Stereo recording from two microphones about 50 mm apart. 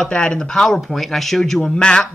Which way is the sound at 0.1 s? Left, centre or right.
Centre.